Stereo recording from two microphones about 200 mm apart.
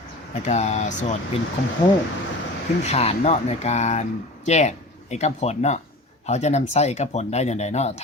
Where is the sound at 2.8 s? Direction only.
30° left (ahead or behind).